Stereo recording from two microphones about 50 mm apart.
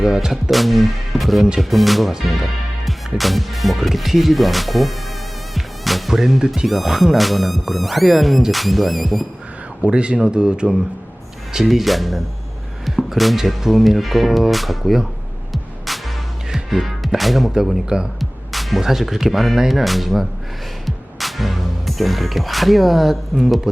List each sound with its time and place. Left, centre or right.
0.0 s speech: centre
0.5 s speech: centre
5.5 s music: centre
6.7 s speech: centre
9.8 s speech: right
11.5 s speech: centre
15.5 s music: centre
17.2 s speech: centre